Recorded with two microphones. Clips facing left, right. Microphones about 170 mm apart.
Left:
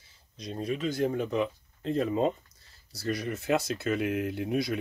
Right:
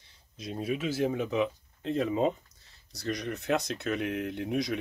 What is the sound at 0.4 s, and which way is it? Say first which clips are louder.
Speech: even; 5° right (ahead or behind).